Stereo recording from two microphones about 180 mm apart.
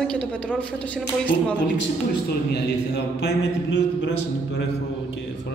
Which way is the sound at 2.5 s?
70° left (ahead or behind).